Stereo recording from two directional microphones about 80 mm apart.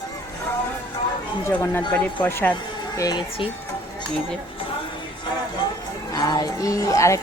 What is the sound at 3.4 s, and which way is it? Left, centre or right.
Speech, left.